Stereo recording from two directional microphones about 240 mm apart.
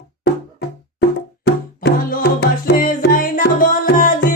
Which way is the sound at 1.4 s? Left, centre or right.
Left.